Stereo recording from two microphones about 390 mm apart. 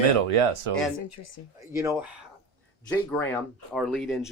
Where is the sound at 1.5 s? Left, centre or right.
Centre.